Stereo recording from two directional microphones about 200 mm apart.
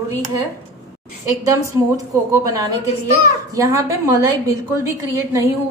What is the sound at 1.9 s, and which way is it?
A woman's voice, 15° right (ahead or behind).